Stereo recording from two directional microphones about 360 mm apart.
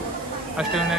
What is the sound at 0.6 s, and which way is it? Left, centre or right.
Speech, centre.